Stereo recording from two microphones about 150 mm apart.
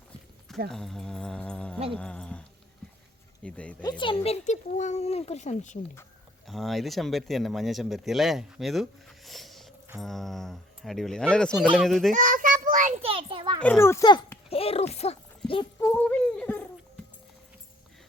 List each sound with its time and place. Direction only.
0.7 s speech: centre (ahead or behind)
2.0 s dog: 5° left (ahead or behind)
3.4 s speech: 10° left (ahead or behind)
3.8 s speech: 35° left (ahead or behind); by 5.8 s 55° left (ahead or behind)
6.5 s speech: centre (ahead or behind)
12.1 s child singing: 60° right (ahead or behind)
13.0 s a sound: 40° right (ahead or behind)
13.6 s speech: 15° left (ahead or behind)
14.5 s speech: 40° left (ahead or behind)
15.8 s a sound: 15° left (ahead or behind)